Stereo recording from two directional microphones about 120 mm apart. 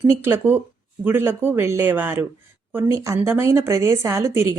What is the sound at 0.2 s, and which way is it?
Speech, 20° right (ahead or behind).